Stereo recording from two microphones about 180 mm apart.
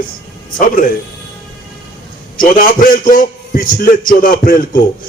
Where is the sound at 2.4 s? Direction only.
50° left (ahead or behind).